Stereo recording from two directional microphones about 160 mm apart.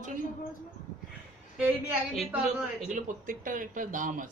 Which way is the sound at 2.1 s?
Centre (ahead or behind).